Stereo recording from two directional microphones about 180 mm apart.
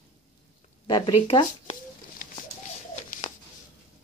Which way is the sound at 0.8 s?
25° left (ahead or behind).